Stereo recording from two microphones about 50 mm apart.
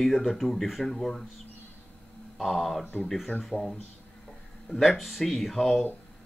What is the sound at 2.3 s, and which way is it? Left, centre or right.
Speech, centre.